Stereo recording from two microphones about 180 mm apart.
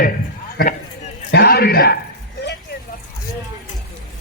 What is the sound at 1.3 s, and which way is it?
Speech, 60° left (ahead or behind).